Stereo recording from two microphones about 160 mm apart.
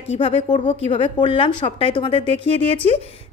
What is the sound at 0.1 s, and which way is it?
A woman's voice, 40° left (ahead or behind).